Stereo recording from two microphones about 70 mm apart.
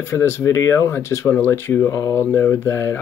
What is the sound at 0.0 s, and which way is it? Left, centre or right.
Speech, left.